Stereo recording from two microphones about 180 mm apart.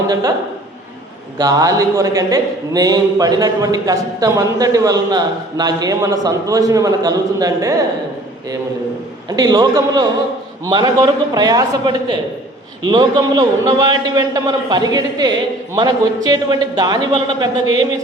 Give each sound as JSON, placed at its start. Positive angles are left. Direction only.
{"t": 0.1, "sound": "a man's voice", "side_deg": -20}
{"t": 1.4, "sound": "a man's voice", "side_deg": -20}
{"t": 9.3, "sound": "a man's voice", "side_deg": -20}